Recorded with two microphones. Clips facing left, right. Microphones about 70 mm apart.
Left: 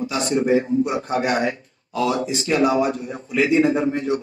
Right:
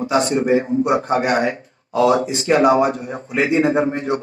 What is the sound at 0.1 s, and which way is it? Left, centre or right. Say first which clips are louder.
A man's voice: right 3 dB; right.